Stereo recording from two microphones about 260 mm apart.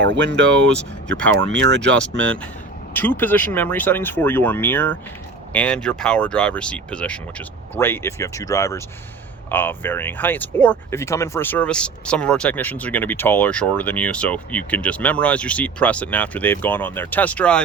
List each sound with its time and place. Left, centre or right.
0.0 s speech: right
0.6 s speech: centre
1.4 s speech: right
2.0 s speech: centre